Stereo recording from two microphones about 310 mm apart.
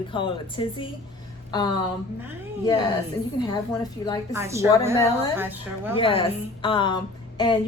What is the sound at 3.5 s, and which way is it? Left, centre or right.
Speech, centre.